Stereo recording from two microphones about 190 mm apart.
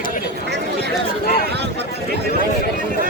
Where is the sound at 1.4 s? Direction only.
60° right (ahead or behind).